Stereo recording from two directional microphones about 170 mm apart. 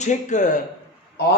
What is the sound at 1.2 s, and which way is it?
Speech, 75° left (ahead or behind).